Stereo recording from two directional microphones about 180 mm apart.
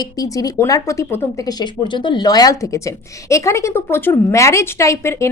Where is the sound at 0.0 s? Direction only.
20° left (ahead or behind).